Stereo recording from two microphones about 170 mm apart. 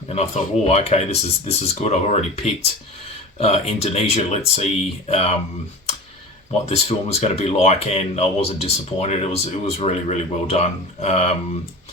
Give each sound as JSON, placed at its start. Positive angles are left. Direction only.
{"t": 0.1, "sound": "speech", "side_deg": 35}
{"t": 6.7, "sound": "speech", "side_deg": 40}